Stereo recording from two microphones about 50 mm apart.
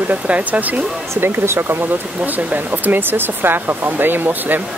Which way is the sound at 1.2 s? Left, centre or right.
Right.